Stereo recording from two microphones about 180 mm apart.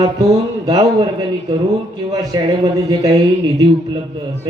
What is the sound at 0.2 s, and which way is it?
Speech, 20° right (ahead or behind).